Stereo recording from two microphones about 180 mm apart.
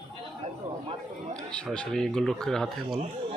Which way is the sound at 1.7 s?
5° left (ahead or behind).